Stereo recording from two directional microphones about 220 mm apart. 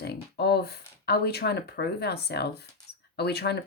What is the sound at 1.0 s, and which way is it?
Speech, 45° left (ahead or behind).